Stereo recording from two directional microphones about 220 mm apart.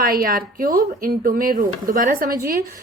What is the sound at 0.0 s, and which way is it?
A woman's voice, 40° right (ahead or behind).